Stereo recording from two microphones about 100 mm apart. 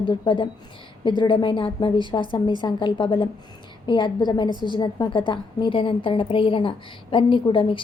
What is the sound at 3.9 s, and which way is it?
A woman's voice, 45° left (ahead or behind).